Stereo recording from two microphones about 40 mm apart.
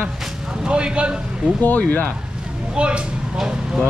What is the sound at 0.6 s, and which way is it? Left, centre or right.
Speech, right.